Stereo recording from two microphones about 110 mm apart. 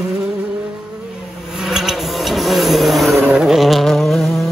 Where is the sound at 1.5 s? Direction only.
5° right (ahead or behind).